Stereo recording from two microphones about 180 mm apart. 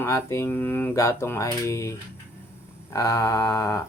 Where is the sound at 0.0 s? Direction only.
15° left (ahead or behind).